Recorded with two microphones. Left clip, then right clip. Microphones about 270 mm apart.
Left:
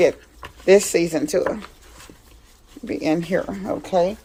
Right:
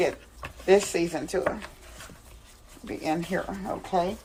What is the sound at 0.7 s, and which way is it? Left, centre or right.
Speech, left.